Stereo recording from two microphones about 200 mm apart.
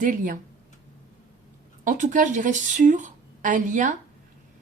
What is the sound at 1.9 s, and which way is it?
Speech, 40° right (ahead or behind).